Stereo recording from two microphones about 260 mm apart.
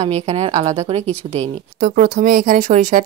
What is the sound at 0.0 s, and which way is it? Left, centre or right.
Speech, right.